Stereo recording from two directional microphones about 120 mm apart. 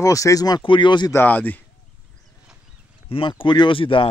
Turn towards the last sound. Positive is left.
turn(degrees=45)  # may be behind; listen again after turning